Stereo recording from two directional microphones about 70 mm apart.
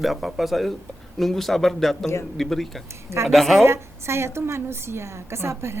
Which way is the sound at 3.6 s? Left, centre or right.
Right.